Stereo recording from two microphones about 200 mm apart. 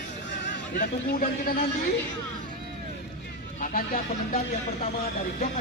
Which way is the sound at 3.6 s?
45° left (ahead or behind).